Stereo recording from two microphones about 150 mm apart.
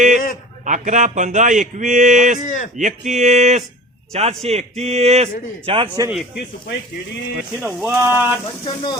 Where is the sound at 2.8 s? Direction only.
55° right (ahead or behind); by 6.1 s 30° right (ahead or behind).